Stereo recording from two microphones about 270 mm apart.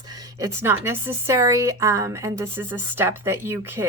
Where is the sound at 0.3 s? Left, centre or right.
Centre.